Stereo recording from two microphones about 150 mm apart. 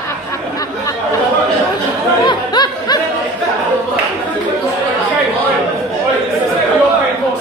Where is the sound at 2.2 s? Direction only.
30° left (ahead or behind).